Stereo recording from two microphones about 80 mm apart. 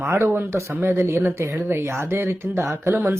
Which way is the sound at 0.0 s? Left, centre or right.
Right.